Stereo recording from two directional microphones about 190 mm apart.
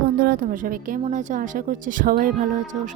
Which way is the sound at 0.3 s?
45° right (ahead or behind).